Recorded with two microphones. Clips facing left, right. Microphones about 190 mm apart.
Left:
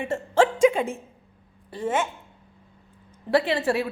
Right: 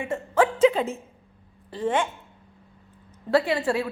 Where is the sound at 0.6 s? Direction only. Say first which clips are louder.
Even; 15° left (ahead or behind).